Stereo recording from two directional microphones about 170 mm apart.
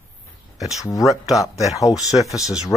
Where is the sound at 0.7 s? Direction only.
20° left (ahead or behind).